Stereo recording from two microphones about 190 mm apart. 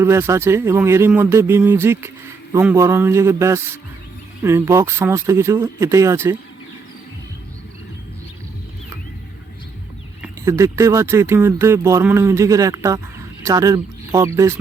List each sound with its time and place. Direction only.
0.0 s speech: 15° right (ahead or behind)
10.4 s speech: 15° right (ahead or behind)